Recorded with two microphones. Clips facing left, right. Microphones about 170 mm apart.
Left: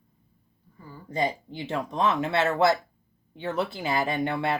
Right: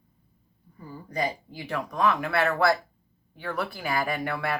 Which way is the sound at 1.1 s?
25° left (ahead or behind).